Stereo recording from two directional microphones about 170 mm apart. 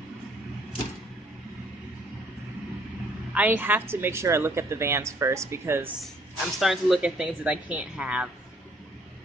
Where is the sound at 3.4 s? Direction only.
10° right (ahead or behind).